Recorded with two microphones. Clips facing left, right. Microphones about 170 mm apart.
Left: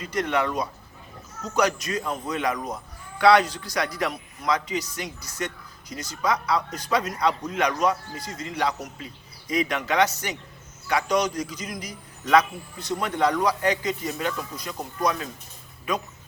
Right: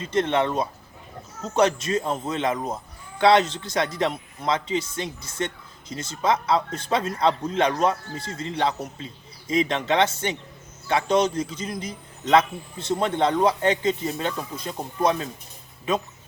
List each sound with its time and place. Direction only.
0.0 s a man's voice: 25° right (ahead or behind)